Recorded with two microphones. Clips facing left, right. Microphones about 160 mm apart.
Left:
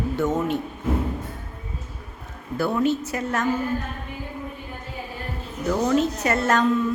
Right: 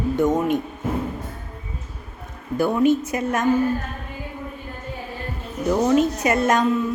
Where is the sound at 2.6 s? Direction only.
15° right (ahead or behind).